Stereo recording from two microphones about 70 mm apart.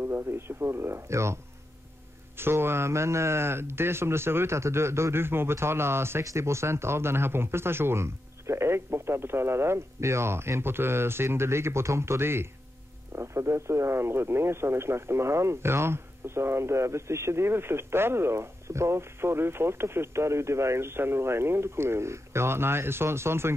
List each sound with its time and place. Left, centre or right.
0.0 s speech: right